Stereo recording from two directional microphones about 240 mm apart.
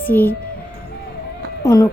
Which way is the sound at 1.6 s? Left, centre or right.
Centre.